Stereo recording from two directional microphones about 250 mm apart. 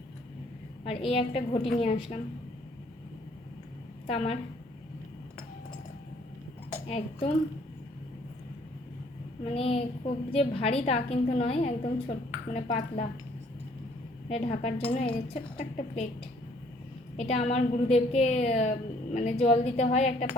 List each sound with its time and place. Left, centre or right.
0.9 s a woman's voice: left
4.0 s a woman's voice: left
6.8 s a woman's voice: left
9.4 s a woman's voice: left
14.3 s a woman's voice: left
17.2 s a woman's voice: left